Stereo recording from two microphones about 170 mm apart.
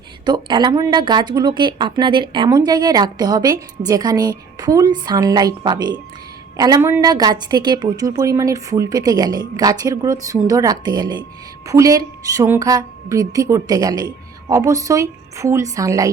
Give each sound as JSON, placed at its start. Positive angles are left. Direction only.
{"t": 0.3, "sound": "a woman's voice", "side_deg": -25}